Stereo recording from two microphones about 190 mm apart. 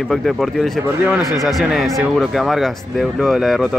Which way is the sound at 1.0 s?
10° right (ahead or behind).